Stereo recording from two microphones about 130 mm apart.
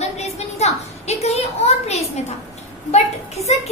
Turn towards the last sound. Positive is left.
turn(degrees=55)  # may be behind; listen again after turning